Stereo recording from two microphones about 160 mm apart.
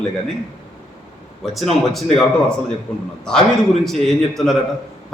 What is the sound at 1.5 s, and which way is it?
A man's voice, centre (ahead or behind).